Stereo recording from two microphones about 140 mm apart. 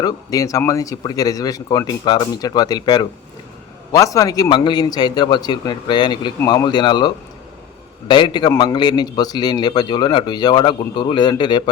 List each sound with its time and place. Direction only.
0.0 s a man's voice: 25° left (ahead or behind)